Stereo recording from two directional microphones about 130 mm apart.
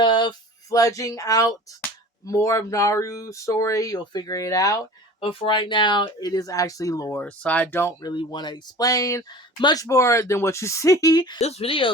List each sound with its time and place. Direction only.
0.0 s a sound: 35° left (ahead or behind)
0.7 s speech: 25° left (ahead or behind)
5.2 s speech: 45° left (ahead or behind); by 7.2 s 25° left (ahead or behind)
7.2 s speech: 10° left (ahead or behind)
8.0 s speech: 35° left (ahead or behind)
11.3 s speech: 55° left (ahead or behind)